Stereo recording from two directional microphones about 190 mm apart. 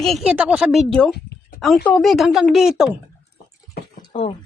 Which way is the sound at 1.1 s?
60° left (ahead or behind).